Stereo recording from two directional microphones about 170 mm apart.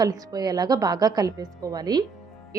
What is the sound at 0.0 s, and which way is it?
A woman's voice, 20° right (ahead or behind).